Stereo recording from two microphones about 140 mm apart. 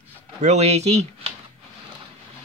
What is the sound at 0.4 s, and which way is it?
Speech, 55° right (ahead or behind).